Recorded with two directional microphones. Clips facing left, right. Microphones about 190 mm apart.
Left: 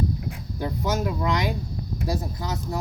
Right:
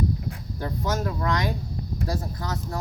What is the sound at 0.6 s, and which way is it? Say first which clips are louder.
Speech: left 2 dB; 5° left (ahead or behind).